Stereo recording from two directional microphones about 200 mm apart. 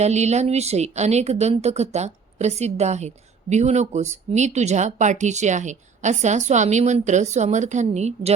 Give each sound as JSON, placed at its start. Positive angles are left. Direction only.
{"t": 0.0, "sound": "speech", "side_deg": -35}